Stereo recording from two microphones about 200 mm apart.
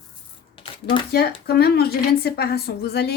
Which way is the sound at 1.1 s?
55° left (ahead or behind).